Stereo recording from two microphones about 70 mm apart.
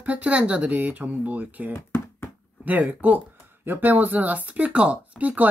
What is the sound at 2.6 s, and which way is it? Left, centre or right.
Speech, right.